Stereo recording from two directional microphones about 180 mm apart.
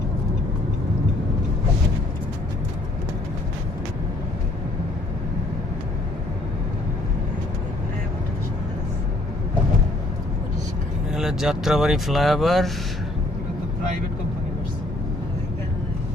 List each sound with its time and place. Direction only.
11.1 s speech: centre (ahead or behind)